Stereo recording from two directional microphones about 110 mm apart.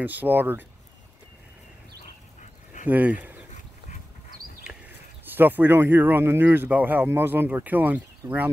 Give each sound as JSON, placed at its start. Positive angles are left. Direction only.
{"t": 0.0, "sound": "speech", "side_deg": -15}
{"t": 2.9, "sound": "speech", "side_deg": -15}
{"t": 5.3, "sound": "speech", "side_deg": -15}